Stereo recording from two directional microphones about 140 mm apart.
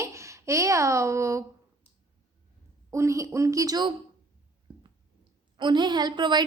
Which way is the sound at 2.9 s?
20° right (ahead or behind).